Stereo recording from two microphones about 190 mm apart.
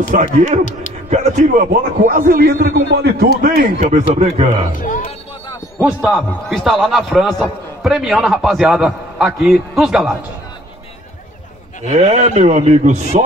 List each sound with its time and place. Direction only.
0.1 s a man's voice: 40° right (ahead or behind); by 3.3 s 55° right (ahead or behind)
3.4 s a man's voice: 45° right (ahead or behind)
4.7 s a sound: 45° left (ahead or behind)
5.8 s a man's voice: 5° right (ahead or behind)
11.9 s a man's voice: 35° right (ahead or behind)